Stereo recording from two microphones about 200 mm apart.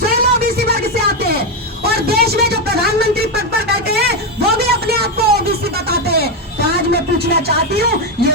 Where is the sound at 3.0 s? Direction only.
50° right (ahead or behind).